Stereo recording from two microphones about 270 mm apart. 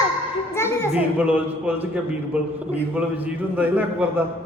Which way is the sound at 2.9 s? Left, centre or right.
Centre.